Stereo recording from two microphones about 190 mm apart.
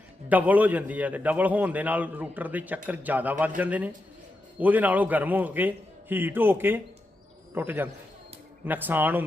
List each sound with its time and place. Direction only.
0.3 s a man's voice: 10° right (ahead or behind)